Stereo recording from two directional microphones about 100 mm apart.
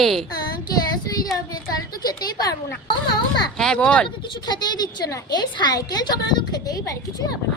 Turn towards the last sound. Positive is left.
turn(degrees=40)  # may be behind; listen again after turning